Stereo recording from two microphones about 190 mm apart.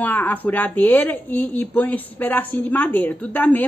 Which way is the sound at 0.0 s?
10° left (ahead or behind).